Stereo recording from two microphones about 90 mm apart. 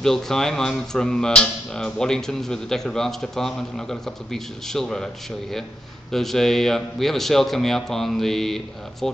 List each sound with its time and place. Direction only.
0.0 s speech: 5° left (ahead or behind)